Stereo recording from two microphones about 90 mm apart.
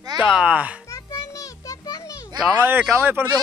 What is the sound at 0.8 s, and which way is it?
Children playing, 40° left (ahead or behind).